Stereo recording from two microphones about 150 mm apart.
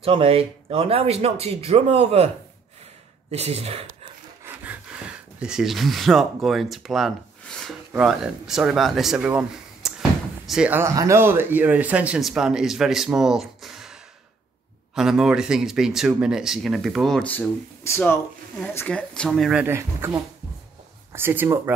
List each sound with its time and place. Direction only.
0.0 s speech: 40° right (ahead or behind)
3.3 s speech: 45° right (ahead or behind)
4.6 s speech: 5° right (ahead or behind)
10.8 s speech: 20° right (ahead or behind); by 13.9 s centre (ahead or behind)
15.0 s speech: 5° right (ahead or behind)
19.6 s speech: 15° right (ahead or behind)